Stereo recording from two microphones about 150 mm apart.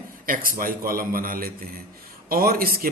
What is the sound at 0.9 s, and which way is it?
Speech, 75° right (ahead or behind).